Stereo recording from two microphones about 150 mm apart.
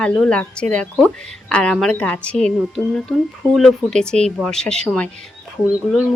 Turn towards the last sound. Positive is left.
turn(degrees=5)  # may be behind; listen again after turning